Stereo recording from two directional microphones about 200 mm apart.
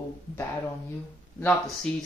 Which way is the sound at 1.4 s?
5° left (ahead or behind).